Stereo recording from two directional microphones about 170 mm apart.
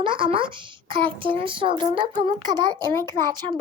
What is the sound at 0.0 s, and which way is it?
Speech, 30° right (ahead or behind).